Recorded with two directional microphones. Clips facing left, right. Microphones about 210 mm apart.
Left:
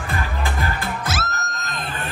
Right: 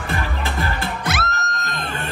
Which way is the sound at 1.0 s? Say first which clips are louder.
Right 2 dB; centre (ahead or behind).